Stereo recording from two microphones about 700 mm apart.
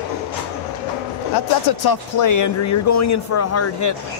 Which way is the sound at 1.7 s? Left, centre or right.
Left.